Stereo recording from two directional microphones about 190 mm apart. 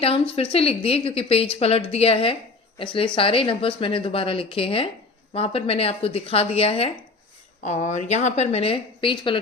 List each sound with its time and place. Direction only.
0.0 s a woman's voice: 30° left (ahead or behind)